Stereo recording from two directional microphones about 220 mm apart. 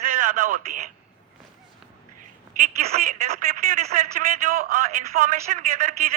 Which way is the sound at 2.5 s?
35° right (ahead or behind).